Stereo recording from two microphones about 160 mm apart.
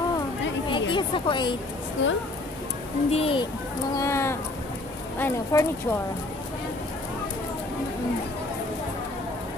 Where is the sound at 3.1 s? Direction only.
35° left (ahead or behind).